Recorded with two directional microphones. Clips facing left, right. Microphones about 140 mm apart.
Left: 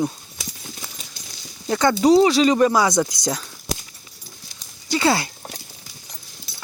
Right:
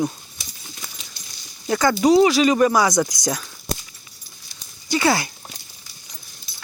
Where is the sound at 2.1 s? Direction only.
30° left (ahead or behind).